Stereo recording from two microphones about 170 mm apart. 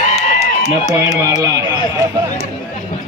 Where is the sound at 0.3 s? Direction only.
40° left (ahead or behind).